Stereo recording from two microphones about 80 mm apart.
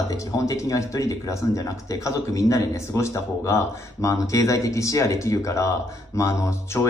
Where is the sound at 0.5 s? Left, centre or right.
Left.